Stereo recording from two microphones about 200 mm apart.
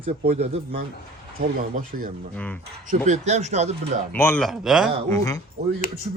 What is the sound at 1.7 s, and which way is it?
Speech, 40° right (ahead or behind).